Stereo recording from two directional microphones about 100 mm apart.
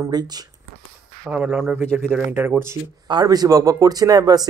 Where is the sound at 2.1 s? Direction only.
20° right (ahead or behind).